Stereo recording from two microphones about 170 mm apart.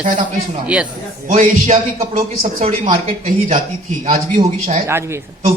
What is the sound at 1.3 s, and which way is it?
Speech, 40° right (ahead or behind).